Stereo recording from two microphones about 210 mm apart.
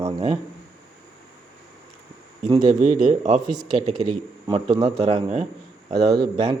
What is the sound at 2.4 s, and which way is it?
Speech, 35° right (ahead or behind).